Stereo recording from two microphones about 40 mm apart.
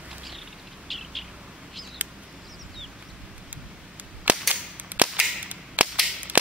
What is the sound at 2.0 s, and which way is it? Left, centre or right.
Bird, right.